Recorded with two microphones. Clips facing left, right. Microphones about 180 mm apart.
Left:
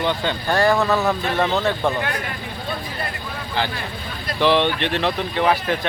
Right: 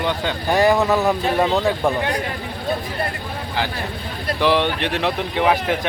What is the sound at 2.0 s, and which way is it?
Speech, 35° right (ahead or behind).